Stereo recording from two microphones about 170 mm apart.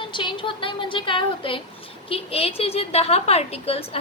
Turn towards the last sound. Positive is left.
turn(degrees=35)  # may be behind; listen again after turning